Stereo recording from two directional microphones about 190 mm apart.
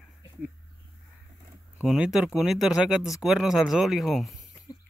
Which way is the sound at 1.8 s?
5° right (ahead or behind).